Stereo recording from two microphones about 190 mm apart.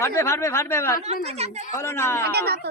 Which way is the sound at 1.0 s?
35° right (ahead or behind).